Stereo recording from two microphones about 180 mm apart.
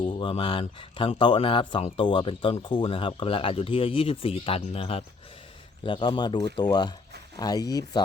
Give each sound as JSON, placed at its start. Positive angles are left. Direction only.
{"t": 0.0, "sound": "speech", "side_deg": 25}